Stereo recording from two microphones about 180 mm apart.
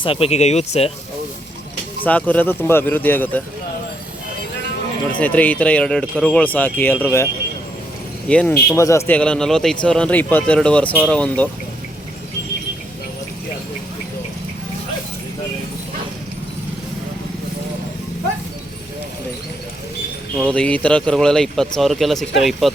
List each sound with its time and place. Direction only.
0.0 s speech: 30° left (ahead or behind)
2.0 s speech: 10° left (ahead or behind)
5.2 s speech: 10° left (ahead or behind)
8.3 s speech: 5° left (ahead or behind)
20.5 s speech: 5° left (ahead or behind)